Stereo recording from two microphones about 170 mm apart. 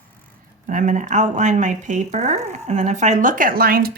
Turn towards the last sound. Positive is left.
turn(degrees=-60)  # may be behind; listen again after turning